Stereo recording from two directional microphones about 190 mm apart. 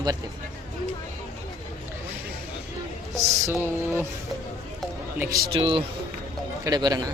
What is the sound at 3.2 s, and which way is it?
Music, 15° right (ahead or behind).